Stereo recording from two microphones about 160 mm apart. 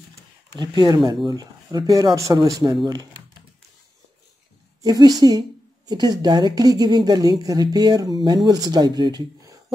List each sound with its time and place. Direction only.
0.6 s a woman's voice: 25° right (ahead or behind)
4.8 s a woman's voice: 25° right (ahead or behind)